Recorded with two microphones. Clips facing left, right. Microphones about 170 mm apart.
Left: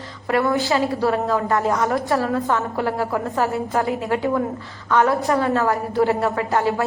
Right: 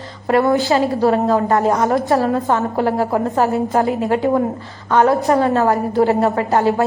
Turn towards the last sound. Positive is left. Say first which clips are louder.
# right 5 dB
turn(degrees=-35)  # may be behind; listen again after turning